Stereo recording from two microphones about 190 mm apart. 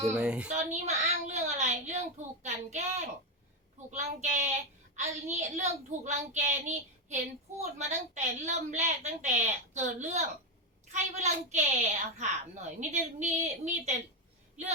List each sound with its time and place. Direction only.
0.2 s a child's voice: 5° right (ahead or behind)
0.5 s a sound: 35° right (ahead or behind)
3.9 s a woman's voice: 40° right (ahead or behind)